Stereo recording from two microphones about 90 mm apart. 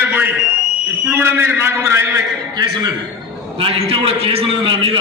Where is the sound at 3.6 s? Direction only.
90° right.